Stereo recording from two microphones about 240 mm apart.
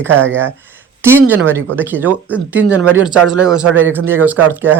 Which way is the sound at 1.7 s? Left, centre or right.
Centre.